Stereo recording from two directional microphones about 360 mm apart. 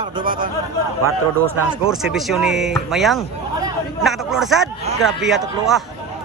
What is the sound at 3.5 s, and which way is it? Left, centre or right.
Chatter, centre.